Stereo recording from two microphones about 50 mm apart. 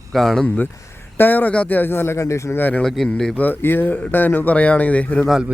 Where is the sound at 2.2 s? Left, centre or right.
Left.